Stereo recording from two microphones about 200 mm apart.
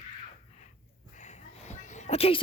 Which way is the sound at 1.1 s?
35° left (ahead or behind).